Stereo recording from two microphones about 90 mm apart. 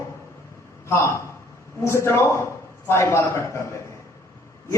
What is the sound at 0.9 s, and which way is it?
A man's voice, 30° left (ahead or behind).